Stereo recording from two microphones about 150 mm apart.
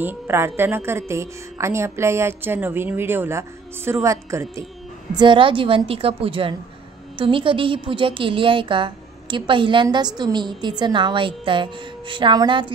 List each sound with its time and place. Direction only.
0.0 s a woman's voice: 15° right (ahead or behind)
5.1 s a woman's voice: 35° right (ahead or behind)